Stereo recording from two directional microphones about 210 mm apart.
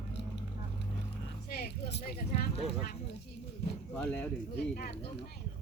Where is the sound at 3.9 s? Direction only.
5° left (ahead or behind).